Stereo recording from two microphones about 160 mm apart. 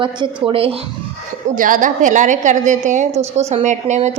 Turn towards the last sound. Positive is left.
turn(degrees=-45)  # may be behind; listen again after turning